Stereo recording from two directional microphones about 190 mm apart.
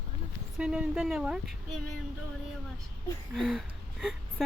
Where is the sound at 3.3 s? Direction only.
5° right (ahead or behind).